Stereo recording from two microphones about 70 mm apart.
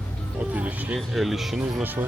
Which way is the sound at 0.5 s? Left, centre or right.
Right.